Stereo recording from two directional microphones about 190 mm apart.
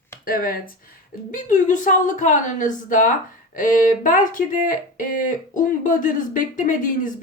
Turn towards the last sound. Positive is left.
turn(degrees=45)  # may be behind; listen again after turning